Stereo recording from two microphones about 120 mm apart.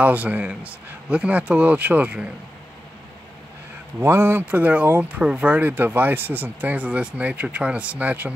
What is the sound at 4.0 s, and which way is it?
Speech, 20° right (ahead or behind).